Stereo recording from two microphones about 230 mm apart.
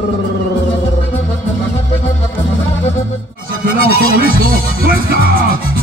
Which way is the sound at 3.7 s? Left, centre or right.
Right.